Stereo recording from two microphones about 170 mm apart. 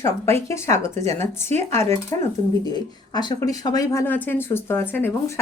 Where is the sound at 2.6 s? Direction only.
25° left (ahead or behind).